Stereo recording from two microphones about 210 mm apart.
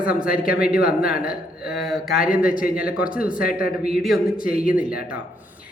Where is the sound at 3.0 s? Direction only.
40° left (ahead or behind).